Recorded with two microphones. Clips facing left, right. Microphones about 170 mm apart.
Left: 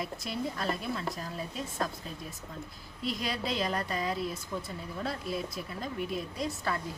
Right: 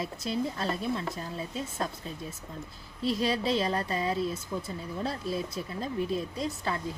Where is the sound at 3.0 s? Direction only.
30° right (ahead or behind).